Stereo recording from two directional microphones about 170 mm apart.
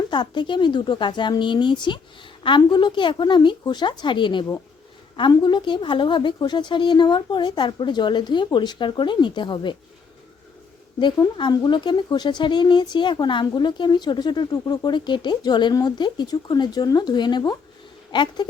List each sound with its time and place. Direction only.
0.1 s speech: 25° left (ahead or behind)
11.0 s speech: 25° left (ahead or behind)